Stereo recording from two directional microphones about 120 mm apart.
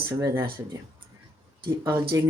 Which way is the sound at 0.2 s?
25° right (ahead or behind).